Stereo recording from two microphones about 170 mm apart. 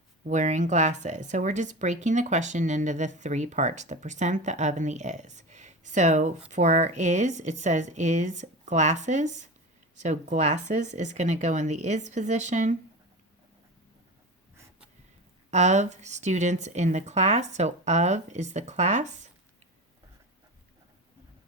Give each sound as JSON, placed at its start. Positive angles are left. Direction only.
{"t": 0.3, "sound": "speech", "side_deg": -45}
{"t": 15.4, "sound": "speech", "side_deg": -40}